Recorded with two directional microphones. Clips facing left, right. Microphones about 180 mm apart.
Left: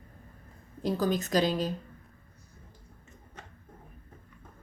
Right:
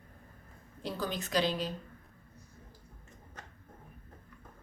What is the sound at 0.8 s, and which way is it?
Speech, 45° left (ahead or behind).